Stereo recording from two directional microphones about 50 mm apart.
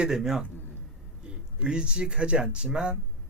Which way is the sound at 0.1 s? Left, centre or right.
Centre.